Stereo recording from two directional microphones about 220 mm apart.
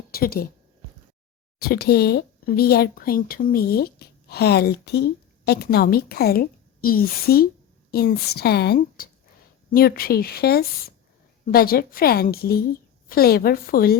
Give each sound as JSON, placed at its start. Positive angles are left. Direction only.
{"t": 0.1, "sound": "a woman's voice", "side_deg": 45}
{"t": 1.5, "sound": "speech", "side_deg": 45}